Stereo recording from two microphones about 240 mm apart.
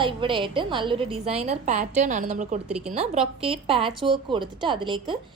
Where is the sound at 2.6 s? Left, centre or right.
Right.